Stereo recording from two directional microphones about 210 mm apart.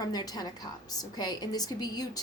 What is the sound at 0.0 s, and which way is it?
A woman's voice, 20° left (ahead or behind).